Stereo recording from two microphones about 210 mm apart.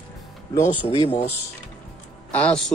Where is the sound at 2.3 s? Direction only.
5° left (ahead or behind).